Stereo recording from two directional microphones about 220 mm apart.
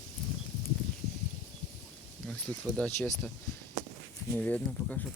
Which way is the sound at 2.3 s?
5° left (ahead or behind).